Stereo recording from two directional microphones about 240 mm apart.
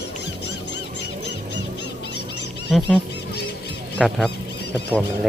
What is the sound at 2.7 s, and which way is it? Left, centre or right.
Speech, centre.